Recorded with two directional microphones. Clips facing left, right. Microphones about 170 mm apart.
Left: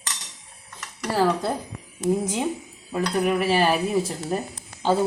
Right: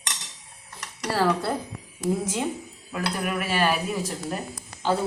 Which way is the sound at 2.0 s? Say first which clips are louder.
Left 3 dB; 20° left (ahead or behind).